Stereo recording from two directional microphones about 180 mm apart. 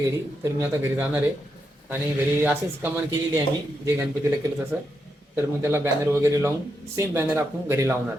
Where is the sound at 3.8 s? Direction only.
15° right (ahead or behind).